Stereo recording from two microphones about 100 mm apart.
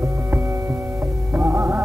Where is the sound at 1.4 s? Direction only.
25° right (ahead or behind).